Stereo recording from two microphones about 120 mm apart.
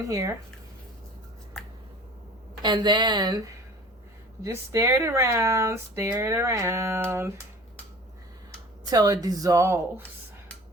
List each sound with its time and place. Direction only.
0.0 s speech: 25° right (ahead or behind)
2.6 s speech: 40° right (ahead or behind); by 7.3 s 20° right (ahead or behind)
8.9 s speech: 30° right (ahead or behind)